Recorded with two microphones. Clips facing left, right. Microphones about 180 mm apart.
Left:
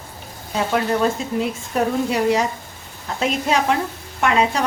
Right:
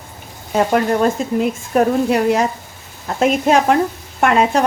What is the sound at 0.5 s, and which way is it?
A woman's voice, 50° right (ahead or behind).